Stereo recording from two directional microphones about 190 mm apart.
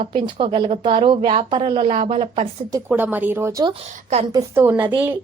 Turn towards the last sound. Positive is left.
turn(degrees=-10)  # may be behind; listen again after turning